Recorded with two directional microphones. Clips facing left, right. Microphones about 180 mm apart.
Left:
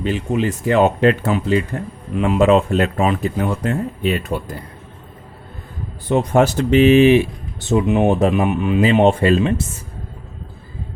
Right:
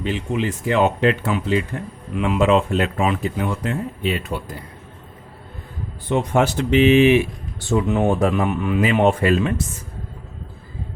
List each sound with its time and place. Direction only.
0.0 s speech: 45° left (ahead or behind)
6.1 s speech: 40° left (ahead or behind)
7.6 s speech: 20° left (ahead or behind)